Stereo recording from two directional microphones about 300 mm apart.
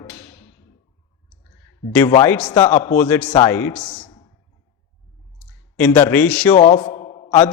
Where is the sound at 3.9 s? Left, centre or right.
Centre.